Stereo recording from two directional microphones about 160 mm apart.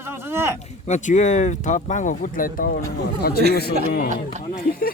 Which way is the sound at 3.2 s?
75° left (ahead or behind).